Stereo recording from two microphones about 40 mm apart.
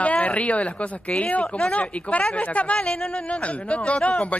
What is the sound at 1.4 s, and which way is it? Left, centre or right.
Speech, left.